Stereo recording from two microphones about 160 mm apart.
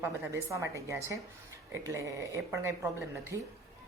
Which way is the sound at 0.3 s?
20° right (ahead or behind).